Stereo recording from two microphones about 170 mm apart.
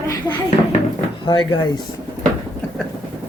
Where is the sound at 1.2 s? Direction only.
25° left (ahead or behind).